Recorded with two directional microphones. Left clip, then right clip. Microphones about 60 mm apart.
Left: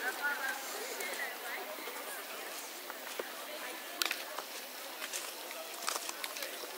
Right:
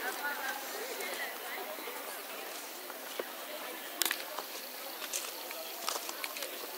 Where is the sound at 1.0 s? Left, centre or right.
Centre.